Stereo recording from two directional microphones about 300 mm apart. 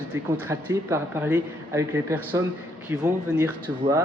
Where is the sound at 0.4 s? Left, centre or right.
Centre.